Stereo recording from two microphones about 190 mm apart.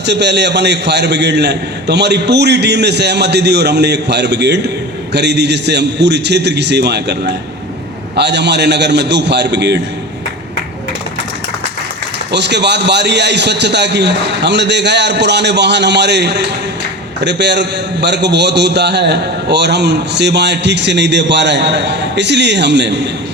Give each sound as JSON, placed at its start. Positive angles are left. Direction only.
{"t": 0.0, "sound": "a man's voice", "side_deg": -65}
{"t": 12.3, "sound": "a man's voice", "side_deg": -65}